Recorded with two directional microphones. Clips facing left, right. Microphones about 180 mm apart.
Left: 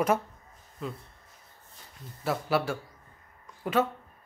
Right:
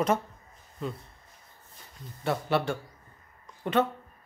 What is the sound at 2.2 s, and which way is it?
Speech, 5° left (ahead or behind).